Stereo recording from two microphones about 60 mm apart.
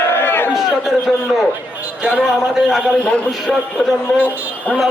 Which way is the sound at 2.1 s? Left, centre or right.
Centre.